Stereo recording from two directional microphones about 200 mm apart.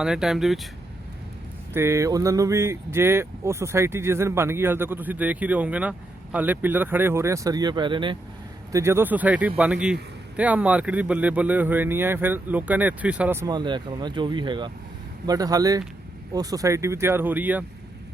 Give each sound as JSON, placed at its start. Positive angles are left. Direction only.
{"t": 0.0, "sound": "speech", "side_deg": -5}
{"t": 1.7, "sound": "speech", "side_deg": -15}
{"t": 8.7, "sound": "speech", "side_deg": -15}